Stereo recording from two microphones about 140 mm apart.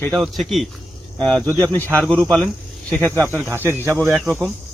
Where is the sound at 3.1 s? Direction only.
15° right (ahead or behind).